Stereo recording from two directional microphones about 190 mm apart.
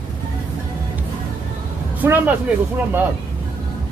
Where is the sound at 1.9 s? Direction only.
10° right (ahead or behind).